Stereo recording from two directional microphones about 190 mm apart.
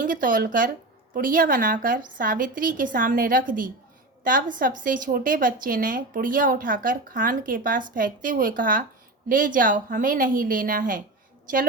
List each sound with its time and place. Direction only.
0.0 s a woman's voice: 45° right (ahead or behind)